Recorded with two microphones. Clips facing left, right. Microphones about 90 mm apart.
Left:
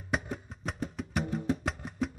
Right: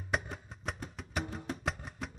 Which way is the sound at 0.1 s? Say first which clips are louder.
Left 2 dB; centre (ahead or behind).